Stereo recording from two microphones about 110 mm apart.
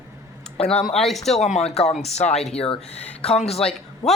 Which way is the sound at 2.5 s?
60° left (ahead or behind).